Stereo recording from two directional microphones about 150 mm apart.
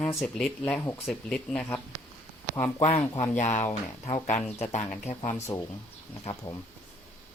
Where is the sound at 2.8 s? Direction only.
40° left (ahead or behind).